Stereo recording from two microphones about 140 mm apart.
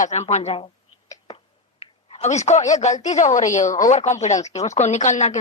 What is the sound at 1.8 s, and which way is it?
A woman's voice, 45° left (ahead or behind).